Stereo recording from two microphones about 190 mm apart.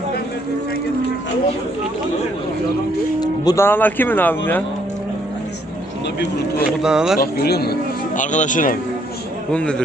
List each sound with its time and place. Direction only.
3.2 s speech: 20° left (ahead or behind)
6.7 s speech: 5° right (ahead or behind)
7.2 s speech: 55° left (ahead or behind)
8.2 s speech: 40° left (ahead or behind)
9.5 s speech: 5° left (ahead or behind)